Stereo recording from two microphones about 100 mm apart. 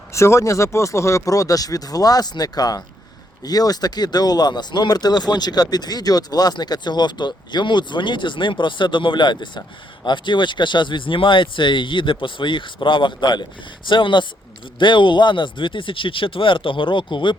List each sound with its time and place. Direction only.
0.1 s speech: 30° left (ahead or behind); by 17.3 s 55° left (ahead or behind)